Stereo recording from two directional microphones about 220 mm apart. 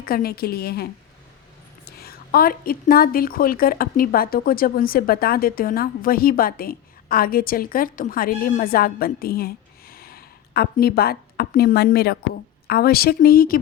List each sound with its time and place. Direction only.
0.0 s a woman's voice: 45° left (ahead or behind)
2.0 s speech: 45° left (ahead or behind)